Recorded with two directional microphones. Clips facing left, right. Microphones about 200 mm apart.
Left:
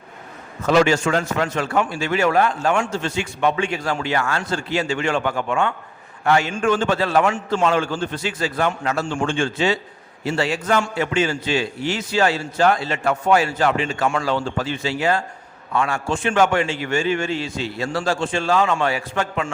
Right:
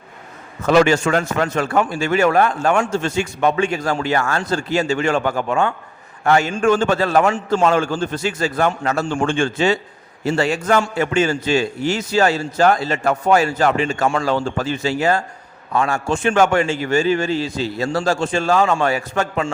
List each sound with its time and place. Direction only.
0.7 s a man's voice: 55° right (ahead or behind)